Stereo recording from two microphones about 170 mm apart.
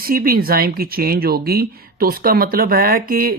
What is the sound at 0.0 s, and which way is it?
Speech, 60° right (ahead or behind).